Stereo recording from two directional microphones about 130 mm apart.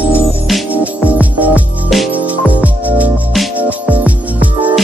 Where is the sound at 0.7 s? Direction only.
10° right (ahead or behind).